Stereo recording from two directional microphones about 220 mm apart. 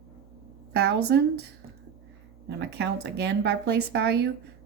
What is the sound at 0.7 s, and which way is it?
Speech, 50° right (ahead or behind).